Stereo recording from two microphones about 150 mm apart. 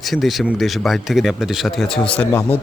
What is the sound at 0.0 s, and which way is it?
Speech, centre (ahead or behind).